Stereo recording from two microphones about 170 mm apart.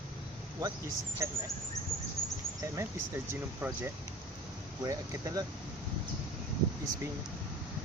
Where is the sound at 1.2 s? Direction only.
15° right (ahead or behind).